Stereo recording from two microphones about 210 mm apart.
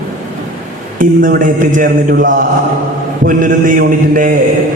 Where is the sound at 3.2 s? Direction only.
40° right (ahead or behind).